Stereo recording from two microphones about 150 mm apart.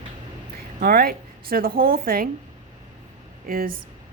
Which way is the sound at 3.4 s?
75° right (ahead or behind).